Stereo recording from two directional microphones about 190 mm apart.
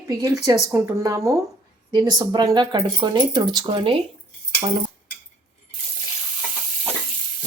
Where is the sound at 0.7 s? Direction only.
15° right (ahead or behind).